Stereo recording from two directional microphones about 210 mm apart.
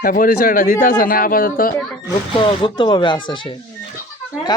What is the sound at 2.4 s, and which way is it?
Speech, 25° left (ahead or behind).